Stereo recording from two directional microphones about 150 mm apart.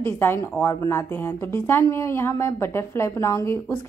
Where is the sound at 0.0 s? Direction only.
15° left (ahead or behind).